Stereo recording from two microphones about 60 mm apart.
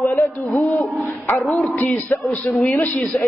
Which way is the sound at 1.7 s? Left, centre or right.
Left.